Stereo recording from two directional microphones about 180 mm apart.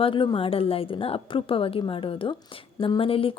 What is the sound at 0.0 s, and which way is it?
A woman's voice, 30° left (ahead or behind).